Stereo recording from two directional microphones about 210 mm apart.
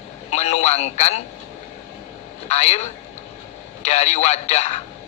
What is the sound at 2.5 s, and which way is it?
Speech, 30° left (ahead or behind).